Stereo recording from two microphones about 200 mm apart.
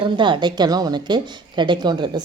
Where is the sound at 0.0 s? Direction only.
25° right (ahead or behind).